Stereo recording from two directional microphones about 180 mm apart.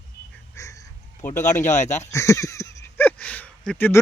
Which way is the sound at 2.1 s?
15° left (ahead or behind).